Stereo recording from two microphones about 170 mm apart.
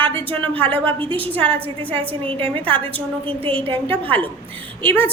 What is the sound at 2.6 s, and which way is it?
Speech, 10° left (ahead or behind).